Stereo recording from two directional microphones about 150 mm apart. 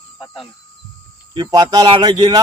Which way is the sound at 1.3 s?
25° right (ahead or behind).